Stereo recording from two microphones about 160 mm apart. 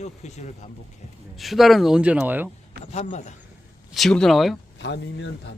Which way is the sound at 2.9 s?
45° left (ahead or behind).